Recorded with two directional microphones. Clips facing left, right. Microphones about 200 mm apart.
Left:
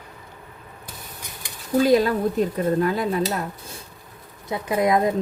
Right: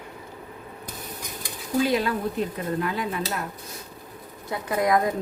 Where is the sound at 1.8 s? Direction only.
40° left (ahead or behind).